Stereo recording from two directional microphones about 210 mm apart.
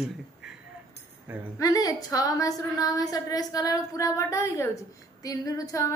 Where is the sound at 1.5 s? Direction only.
15° left (ahead or behind).